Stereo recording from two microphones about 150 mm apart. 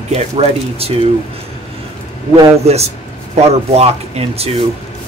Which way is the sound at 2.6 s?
45° right (ahead or behind).